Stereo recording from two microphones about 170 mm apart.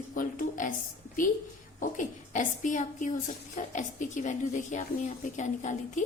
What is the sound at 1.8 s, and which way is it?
A woman's voice, 50° left (ahead or behind).